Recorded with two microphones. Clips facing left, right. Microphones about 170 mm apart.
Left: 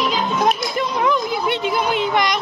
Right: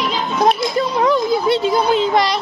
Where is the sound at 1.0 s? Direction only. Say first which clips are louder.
Right 4 dB; 35° right (ahead or behind).